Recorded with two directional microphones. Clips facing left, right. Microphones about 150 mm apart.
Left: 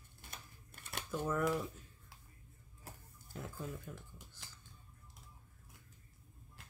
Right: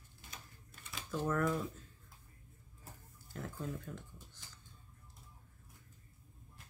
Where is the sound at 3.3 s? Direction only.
5° left (ahead or behind).